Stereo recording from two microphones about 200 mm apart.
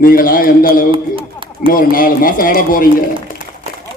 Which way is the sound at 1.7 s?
45° left (ahead or behind).